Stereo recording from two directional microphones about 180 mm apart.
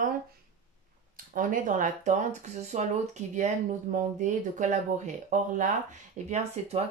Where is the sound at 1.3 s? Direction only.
45° right (ahead or behind).